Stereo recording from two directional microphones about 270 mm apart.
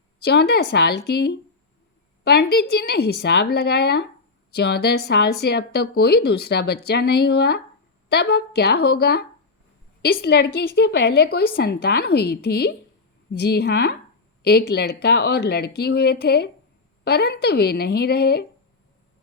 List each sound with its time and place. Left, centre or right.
0.3 s a woman's voice: left